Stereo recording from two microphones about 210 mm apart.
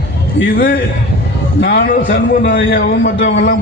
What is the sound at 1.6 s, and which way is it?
Speech, 45° left (ahead or behind).